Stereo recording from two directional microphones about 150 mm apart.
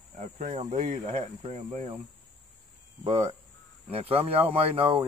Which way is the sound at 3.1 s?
45° right (ahead or behind).